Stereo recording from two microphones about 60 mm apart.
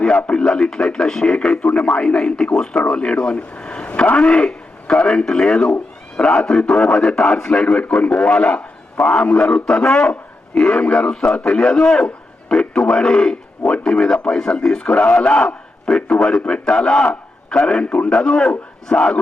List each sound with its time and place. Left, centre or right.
0.0 s a man's voice: centre